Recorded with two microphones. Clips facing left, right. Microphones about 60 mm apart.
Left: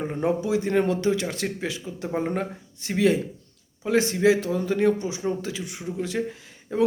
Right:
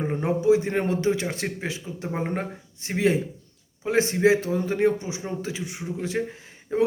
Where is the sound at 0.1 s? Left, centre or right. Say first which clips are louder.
Right 5 dB; right.